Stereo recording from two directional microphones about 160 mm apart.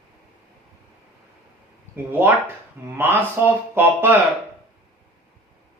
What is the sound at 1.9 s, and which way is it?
Speech, 15° right (ahead or behind).